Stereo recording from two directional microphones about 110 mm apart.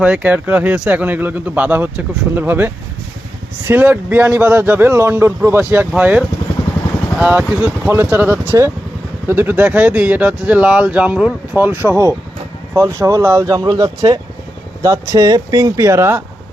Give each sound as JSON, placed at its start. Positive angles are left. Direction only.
{"t": 0.0, "sound": "speech", "side_deg": -10}